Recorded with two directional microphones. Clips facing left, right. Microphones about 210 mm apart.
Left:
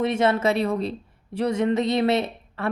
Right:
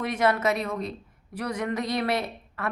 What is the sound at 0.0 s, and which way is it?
Speech, 25° left (ahead or behind).